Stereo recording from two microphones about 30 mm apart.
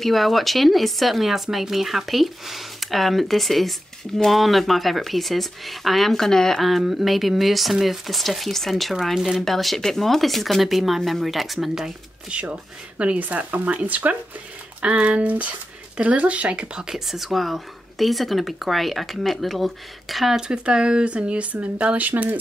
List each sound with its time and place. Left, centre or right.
0.0 s speech: centre
6.1 s speech: centre
6.8 s speech: centre
8.2 s speech: centre
9.0 s speech: centre
9.4 s speech: centre
12.3 s speech: right
13.8 s speech: right
14.9 s speech: right
16.9 s speech: centre
20.3 s speech: right
21.9 s speech: right